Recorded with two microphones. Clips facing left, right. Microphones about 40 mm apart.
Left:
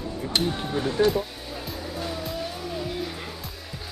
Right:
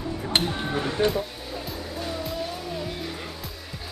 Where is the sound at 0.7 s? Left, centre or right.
Right.